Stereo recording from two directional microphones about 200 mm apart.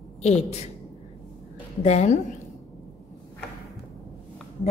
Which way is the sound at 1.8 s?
35° left (ahead or behind).